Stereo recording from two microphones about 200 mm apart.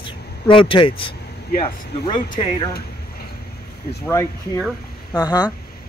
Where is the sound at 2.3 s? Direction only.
30° left (ahead or behind).